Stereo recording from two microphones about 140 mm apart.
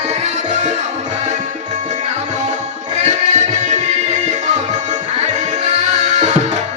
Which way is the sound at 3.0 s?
55° right (ahead or behind).